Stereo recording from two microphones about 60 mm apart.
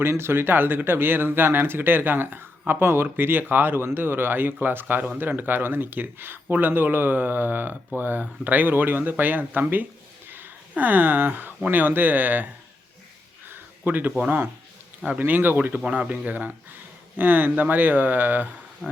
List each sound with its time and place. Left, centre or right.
0.0 s speech: right
13.5 s a sound: right
14.3 s speech: right
18.8 s speech: centre